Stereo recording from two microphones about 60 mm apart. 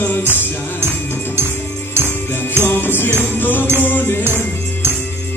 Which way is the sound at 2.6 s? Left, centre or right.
Left.